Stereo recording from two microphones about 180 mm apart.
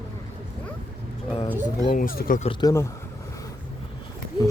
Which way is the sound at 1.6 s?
50° left (ahead or behind).